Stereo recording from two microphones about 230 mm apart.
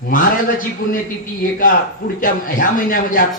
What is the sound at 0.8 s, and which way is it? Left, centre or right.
Speech, left.